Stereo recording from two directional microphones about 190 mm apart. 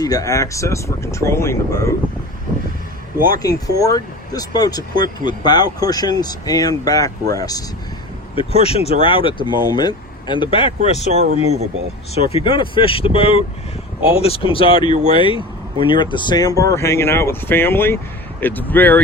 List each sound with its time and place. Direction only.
0.0 s speech: 20° left (ahead or behind)
3.8 s speech: 20° left (ahead or behind)
8.4 s speech: 30° left (ahead or behind)
10.8 s speech: 40° right (ahead or behind)
12.1 s speech: 30° left (ahead or behind); by 18.9 s 10° left (ahead or behind)